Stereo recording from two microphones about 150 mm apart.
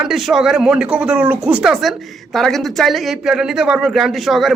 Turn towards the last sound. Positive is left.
turn(degrees=0)  # may be behind; listen again after turning